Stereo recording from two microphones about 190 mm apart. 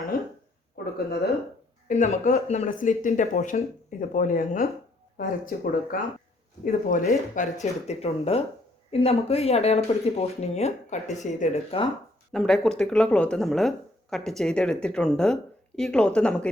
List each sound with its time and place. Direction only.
1.9 s speech: 40° left (ahead or behind)
12.3 s speech: centre (ahead or behind)